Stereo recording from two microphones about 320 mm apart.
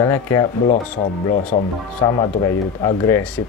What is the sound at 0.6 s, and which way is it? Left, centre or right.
Speech, left.